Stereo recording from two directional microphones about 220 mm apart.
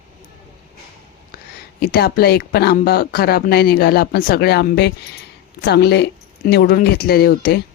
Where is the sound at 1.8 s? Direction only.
45° left (ahead or behind).